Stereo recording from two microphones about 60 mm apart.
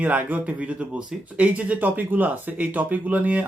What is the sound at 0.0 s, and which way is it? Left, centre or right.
Speech, right.